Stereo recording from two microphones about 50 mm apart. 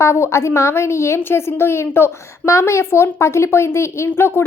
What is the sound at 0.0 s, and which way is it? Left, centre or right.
A woman's voice, left.